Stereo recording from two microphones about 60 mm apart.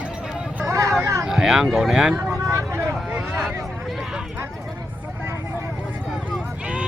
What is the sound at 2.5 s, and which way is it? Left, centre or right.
Vehicle, right.